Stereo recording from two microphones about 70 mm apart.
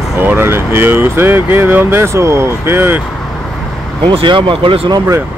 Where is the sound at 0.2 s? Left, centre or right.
Right.